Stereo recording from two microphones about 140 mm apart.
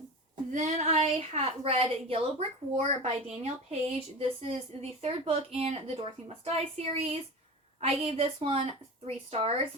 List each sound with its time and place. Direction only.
0.5 s speech: 55° right (ahead or behind)